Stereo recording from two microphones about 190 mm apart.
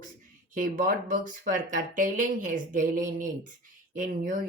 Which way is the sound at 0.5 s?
45° right (ahead or behind).